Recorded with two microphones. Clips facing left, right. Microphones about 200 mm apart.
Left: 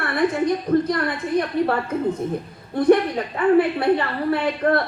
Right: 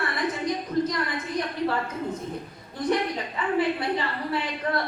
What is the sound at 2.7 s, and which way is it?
A woman's voice, 60° left (ahead or behind).